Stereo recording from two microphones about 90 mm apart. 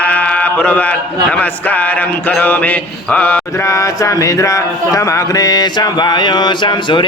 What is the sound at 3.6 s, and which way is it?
Mantra, 35° left (ahead or behind).